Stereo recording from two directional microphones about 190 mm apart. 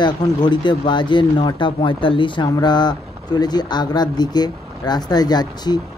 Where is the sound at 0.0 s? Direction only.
25° left (ahead or behind).